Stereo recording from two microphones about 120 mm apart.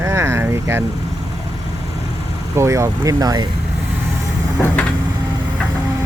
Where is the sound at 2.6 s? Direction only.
25° right (ahead or behind).